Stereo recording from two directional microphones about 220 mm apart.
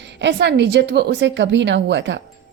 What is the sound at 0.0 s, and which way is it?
A woman's voice, 55° right (ahead or behind).